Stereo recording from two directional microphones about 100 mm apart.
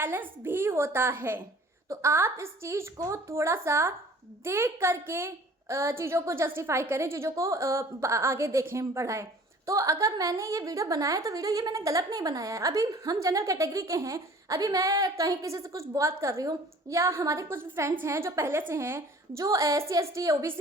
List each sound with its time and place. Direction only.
0.0 s a woman's voice: 20° right (ahead or behind)